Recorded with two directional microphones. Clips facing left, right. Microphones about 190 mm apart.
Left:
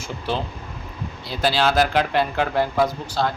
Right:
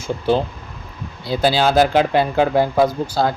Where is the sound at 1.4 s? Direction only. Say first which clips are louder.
Right 4 dB; 25° right (ahead or behind).